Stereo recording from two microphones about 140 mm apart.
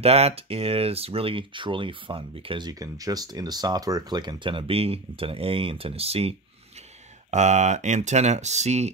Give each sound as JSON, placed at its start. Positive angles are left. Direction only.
{"t": 0.0, "sound": "speech", "side_deg": -45}
{"t": 2.8, "sound": "speech", "side_deg": -25}
{"t": 7.2, "sound": "speech", "side_deg": -55}